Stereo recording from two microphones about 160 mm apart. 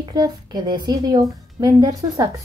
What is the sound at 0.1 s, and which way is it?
A woman's voice, 25° right (ahead or behind).